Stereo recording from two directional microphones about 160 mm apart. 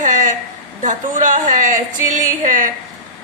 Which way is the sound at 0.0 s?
50° right (ahead or behind).